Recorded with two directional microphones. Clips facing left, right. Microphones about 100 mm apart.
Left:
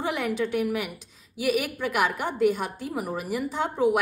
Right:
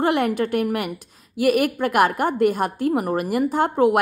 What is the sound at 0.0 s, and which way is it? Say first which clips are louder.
A woman's voice: right 7 dB; 60° right (ahead or behind).